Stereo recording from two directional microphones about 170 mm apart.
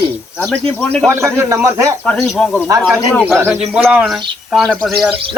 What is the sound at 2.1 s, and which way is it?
Speech, 5° left (ahead or behind).